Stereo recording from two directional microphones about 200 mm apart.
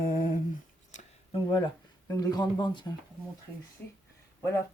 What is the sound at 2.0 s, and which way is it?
Speech, 15° left (ahead or behind).